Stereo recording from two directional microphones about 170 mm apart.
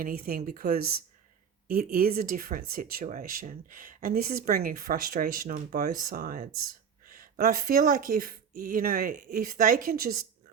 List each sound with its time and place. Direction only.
0.0 s speech: 60° right (ahead or behind)